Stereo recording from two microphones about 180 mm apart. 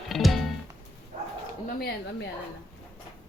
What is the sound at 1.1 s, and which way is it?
Bow-wow, 40° right (ahead or behind).